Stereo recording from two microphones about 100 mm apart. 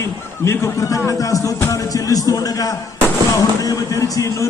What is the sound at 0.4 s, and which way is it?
Music, 30° left (ahead or behind).